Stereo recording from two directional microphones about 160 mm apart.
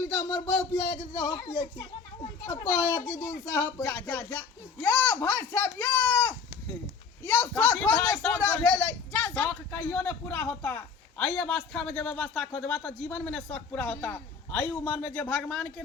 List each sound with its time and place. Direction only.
0.3 s speech: 20° left (ahead or behind)
2.5 s speech: 20° left (ahead or behind)
7.3 s speech: 10° left (ahead or behind)